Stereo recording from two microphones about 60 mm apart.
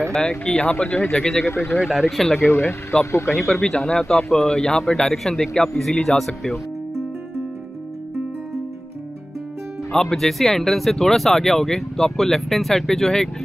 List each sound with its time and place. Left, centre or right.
0.1 s a man's voice: centre
1.4 s speech: left
1.8 s speech: centre
2.4 s speech: left
3.3 s a man's voice: centre
9.9 s speech: centre